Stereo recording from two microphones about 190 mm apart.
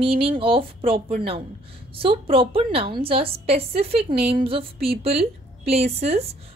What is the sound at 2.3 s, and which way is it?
A woman's voice, 30° right (ahead or behind).